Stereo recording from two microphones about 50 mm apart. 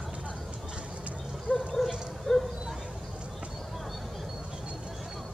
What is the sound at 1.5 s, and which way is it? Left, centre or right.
Dog, left.